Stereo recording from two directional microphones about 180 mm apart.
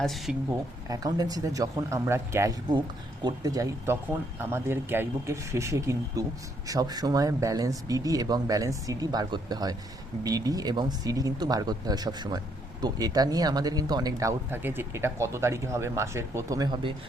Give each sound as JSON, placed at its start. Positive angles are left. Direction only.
{"t": 0.0, "sound": "speech", "side_deg": 0}
{"t": 0.9, "sound": "speech", "side_deg": -20}